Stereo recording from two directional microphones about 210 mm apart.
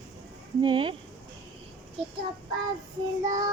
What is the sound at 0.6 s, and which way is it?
Speech, 25° right (ahead or behind).